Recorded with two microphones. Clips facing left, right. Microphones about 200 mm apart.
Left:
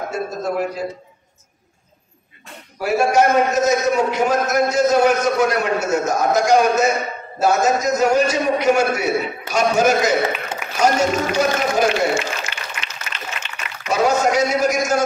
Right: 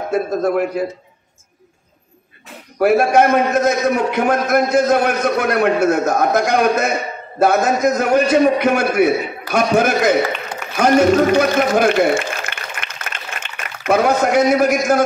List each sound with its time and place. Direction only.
0.1 s a man's voice: 55° right (ahead or behind)
2.8 s a man's voice: 55° right (ahead or behind)
10.8 s a sound: 55° right (ahead or behind)